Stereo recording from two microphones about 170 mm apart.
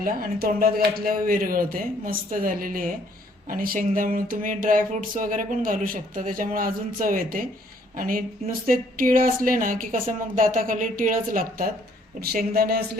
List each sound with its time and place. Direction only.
0.0 s a woman's voice: 55° right (ahead or behind)